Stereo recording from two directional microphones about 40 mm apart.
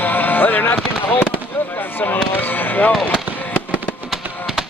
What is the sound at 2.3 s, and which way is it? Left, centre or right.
Music, left.